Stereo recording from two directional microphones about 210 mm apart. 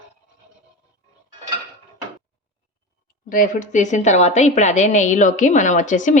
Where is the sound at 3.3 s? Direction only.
35° left (ahead or behind).